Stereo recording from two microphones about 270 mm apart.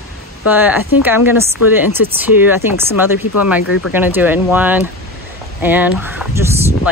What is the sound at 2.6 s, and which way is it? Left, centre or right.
Speech, centre.